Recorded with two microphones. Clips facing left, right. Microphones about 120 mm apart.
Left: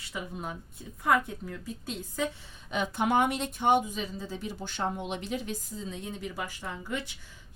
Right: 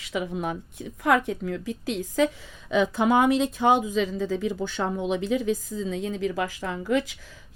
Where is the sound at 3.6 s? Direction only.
90° right.